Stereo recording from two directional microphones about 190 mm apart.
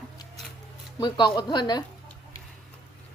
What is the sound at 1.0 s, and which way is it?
Speech, 25° left (ahead or behind).